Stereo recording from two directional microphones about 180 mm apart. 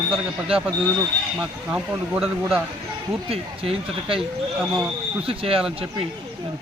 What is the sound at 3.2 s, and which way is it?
Speech, 30° right (ahead or behind).